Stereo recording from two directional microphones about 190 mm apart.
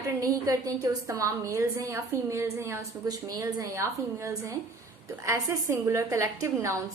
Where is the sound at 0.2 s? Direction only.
20° right (ahead or behind).